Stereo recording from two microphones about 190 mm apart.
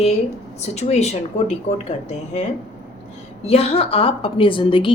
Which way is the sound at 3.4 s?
35° left (ahead or behind).